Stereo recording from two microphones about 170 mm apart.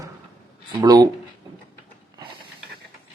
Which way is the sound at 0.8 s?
20° right (ahead or behind).